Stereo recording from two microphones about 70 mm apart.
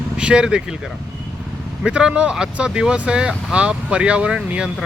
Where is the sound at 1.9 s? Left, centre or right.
Centre.